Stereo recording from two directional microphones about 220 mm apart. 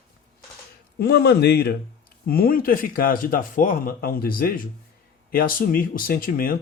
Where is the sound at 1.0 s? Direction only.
45° left (ahead or behind).